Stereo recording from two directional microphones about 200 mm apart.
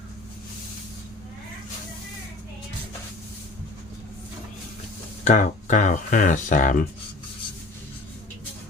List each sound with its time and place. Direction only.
5.2 s speech: 35° left (ahead or behind)